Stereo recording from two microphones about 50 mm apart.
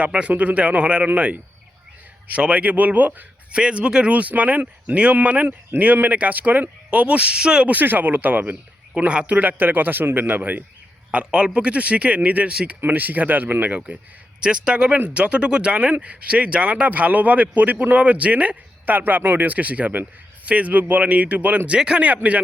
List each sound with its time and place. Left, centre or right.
0.0 s speech: right
2.4 s a man's voice: right
3.5 s speech: right
7.7 s a man's voice: right
9.0 s a man's voice: right
11.1 s a man's voice: right
14.4 s speech: centre
22.0 s a man's voice: right